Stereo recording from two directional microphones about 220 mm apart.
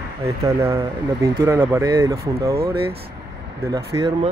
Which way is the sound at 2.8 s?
25° right (ahead or behind).